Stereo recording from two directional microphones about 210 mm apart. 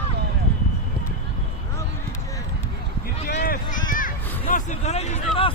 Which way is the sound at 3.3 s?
45° left (ahead or behind).